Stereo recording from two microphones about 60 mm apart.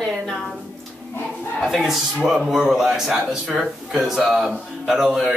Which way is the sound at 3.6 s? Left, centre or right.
Centre.